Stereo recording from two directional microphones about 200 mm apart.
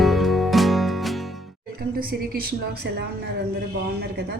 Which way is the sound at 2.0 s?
50° right (ahead or behind).